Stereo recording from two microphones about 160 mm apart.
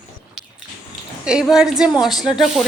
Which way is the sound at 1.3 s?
5° right (ahead or behind).